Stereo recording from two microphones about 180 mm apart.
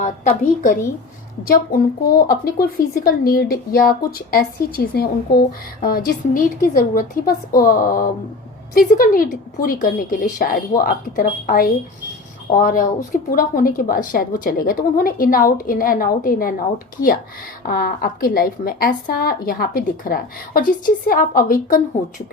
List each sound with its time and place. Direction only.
0.0 s a woman's voice: 45° left (ahead or behind)
1.5 s a woman's voice: 55° left (ahead or behind)